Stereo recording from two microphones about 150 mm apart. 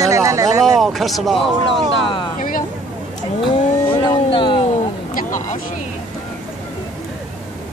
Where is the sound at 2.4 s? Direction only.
65° left (ahead or behind).